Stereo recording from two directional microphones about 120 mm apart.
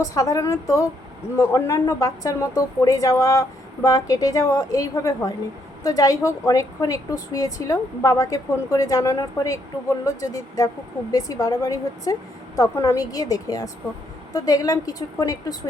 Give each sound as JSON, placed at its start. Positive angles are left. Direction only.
{"t": 0.0, "sound": "a woman's voice", "side_deg": 30}